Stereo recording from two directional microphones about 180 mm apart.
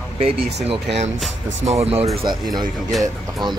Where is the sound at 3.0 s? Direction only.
25° right (ahead or behind).